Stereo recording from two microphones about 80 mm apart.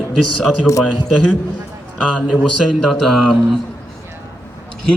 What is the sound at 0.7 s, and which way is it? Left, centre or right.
Speech, left.